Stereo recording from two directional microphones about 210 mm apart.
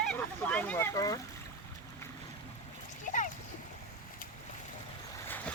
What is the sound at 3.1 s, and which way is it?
Splash, 40° left (ahead or behind).